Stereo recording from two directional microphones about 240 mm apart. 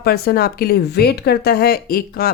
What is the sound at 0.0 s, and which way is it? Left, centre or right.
Speech, left.